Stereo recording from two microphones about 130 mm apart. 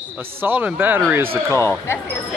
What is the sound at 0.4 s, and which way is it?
Speech, 15° right (ahead or behind).